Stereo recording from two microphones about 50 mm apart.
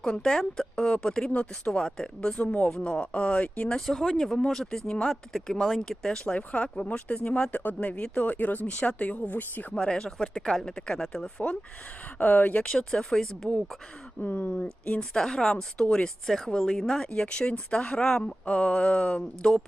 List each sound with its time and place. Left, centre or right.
0.0 s speech: centre
3.8 s speech: centre
6.3 s speech: left
9.7 s speech: centre
12.2 s speech: left
12.6 s speech: centre
14.2 s speech: left
15.1 s speech: centre
17.1 s speech: left